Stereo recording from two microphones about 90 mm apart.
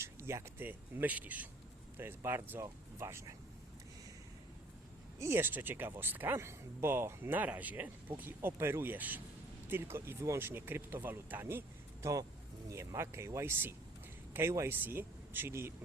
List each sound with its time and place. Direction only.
0.0 s speech: 30° right (ahead or behind)
5.2 s speech: 25° right (ahead or behind)